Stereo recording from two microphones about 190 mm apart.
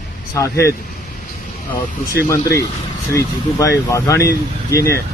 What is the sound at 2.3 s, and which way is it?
Speech, 15° left (ahead or behind).